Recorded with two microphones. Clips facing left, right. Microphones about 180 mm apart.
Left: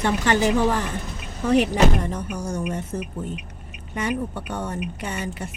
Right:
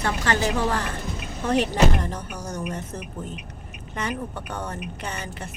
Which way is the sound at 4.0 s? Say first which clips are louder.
Left 4 dB; 15° left (ahead or behind).